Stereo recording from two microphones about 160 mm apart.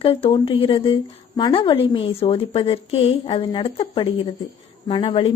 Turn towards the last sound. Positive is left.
turn(degrees=35)  # may be behind; listen again after turning